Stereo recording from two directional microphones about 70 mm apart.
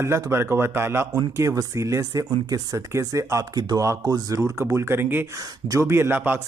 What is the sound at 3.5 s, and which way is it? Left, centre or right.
Speech, right.